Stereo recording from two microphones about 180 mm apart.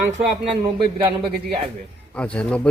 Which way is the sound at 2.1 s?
5° left (ahead or behind).